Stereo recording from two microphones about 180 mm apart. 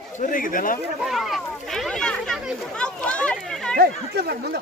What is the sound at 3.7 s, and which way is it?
Speech, 60° right (ahead or behind).